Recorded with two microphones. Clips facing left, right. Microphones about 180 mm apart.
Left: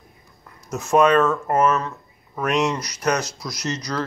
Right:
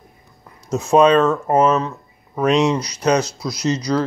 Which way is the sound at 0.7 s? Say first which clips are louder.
Right 4 dB; 30° right (ahead or behind).